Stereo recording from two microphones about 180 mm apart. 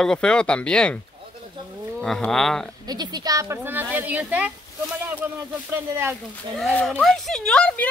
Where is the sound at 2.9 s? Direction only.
20° right (ahead or behind).